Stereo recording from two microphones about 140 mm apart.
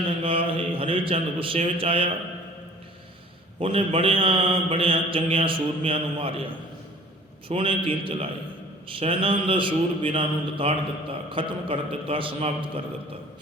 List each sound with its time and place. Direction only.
0.2 s a man's voice: 40° right (ahead or behind)
3.6 s a man's voice: 45° right (ahead or behind)
7.4 s a man's voice: 40° right (ahead or behind)